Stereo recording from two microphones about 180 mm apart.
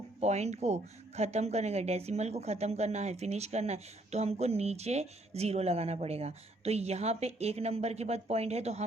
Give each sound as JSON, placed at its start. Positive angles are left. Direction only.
{"t": 0.2, "sound": "speech", "side_deg": -40}